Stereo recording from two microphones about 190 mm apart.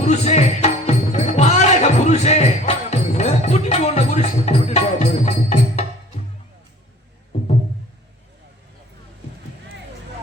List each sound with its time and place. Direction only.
0.1 s music: 35° left (ahead or behind)